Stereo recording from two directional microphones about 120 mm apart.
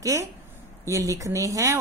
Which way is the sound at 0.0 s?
25° right (ahead or behind).